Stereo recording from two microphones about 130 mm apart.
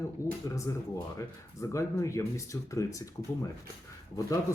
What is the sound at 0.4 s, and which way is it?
Speech, 25° left (ahead or behind).